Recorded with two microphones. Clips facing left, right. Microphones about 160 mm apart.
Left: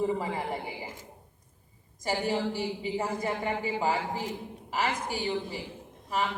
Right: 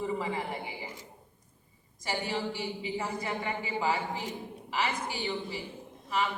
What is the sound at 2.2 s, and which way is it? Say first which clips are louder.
Speech: left 5 dB; 45° left (ahead or behind).